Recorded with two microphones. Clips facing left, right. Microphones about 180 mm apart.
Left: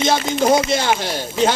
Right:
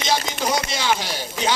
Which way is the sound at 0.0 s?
50° left (ahead or behind).